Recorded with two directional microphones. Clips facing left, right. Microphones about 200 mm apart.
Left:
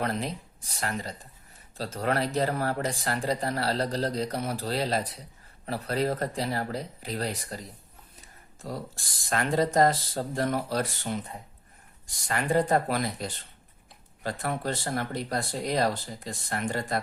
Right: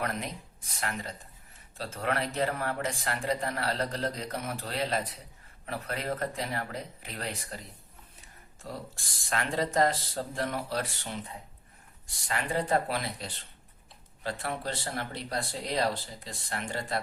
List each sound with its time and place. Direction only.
0.0 s speech: 30° left (ahead or behind)
9.3 s speech: 40° left (ahead or behind)
12.3 s speech: 45° left (ahead or behind)